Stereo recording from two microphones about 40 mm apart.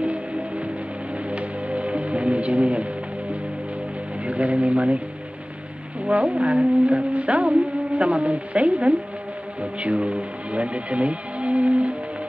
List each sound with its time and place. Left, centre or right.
0.0 s music: right
4.2 s speech: right
6.0 s music: right